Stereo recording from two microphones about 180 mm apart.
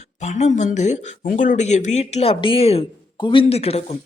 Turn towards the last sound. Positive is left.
turn(degrees=35)  # may be behind; listen again after turning